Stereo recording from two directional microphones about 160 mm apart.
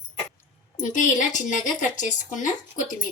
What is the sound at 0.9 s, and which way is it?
A woman's voice, 50° left (ahead or behind).